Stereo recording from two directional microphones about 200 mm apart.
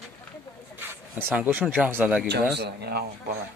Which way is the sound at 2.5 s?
50° right (ahead or behind).